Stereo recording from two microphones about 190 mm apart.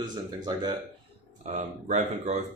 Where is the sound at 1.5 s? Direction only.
40° right (ahead or behind).